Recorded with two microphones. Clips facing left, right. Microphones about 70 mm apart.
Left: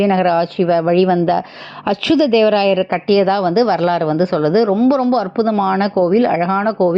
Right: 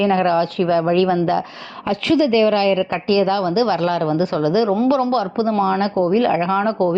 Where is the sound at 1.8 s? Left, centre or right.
Left.